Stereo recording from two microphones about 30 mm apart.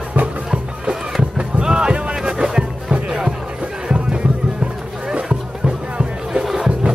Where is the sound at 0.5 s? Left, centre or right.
Right.